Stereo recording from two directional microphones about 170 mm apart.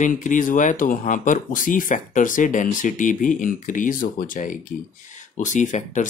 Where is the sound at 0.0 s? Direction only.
50° left (ahead or behind).